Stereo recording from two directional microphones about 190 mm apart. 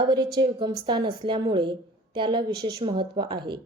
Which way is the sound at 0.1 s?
25° right (ahead or behind).